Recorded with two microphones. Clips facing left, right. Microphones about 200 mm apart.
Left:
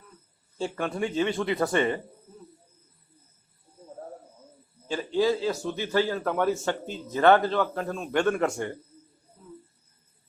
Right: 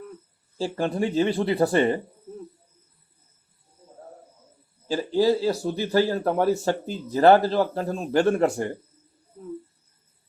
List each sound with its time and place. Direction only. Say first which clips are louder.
0.6 s a man's voice: right 4 dB; 35° right (ahead or behind)
4.9 s a man's voice: right 4 dB; 35° right (ahead or behind)